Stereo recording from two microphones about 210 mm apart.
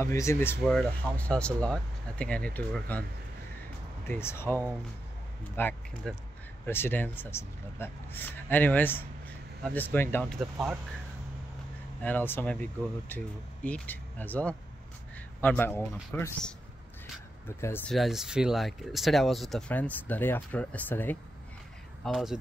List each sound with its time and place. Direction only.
0.0 s speech: 15° left (ahead or behind)
4.1 s speech: 10° left (ahead or behind)
12.0 s speech: 10° left (ahead or behind)
17.9 s speech: centre (ahead or behind)